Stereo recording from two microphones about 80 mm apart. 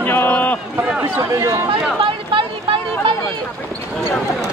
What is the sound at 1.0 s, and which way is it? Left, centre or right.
Speech, right.